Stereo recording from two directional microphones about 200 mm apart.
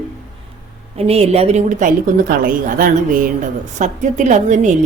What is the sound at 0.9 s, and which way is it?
A woman's voice, 30° right (ahead or behind).